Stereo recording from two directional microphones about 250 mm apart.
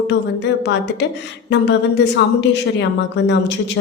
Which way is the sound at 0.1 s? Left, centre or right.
Left.